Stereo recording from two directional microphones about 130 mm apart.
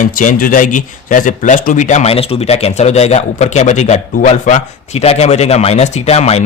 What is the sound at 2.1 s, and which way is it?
Speech, 50° left (ahead or behind).